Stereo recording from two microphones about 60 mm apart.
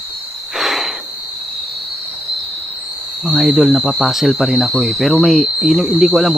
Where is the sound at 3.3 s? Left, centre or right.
Centre.